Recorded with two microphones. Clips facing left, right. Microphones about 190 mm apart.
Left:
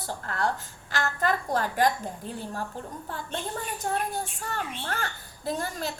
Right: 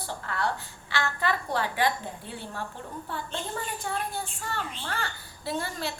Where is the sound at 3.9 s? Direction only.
45° left (ahead or behind).